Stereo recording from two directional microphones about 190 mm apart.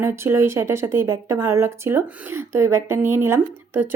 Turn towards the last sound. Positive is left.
turn(degrees=-10)  # may be behind; listen again after turning